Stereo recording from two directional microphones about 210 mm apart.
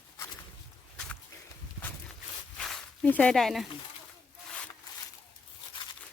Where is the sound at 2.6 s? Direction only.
5° left (ahead or behind).